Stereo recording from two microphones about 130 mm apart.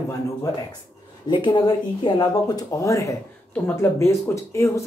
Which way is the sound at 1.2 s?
35° left (ahead or behind).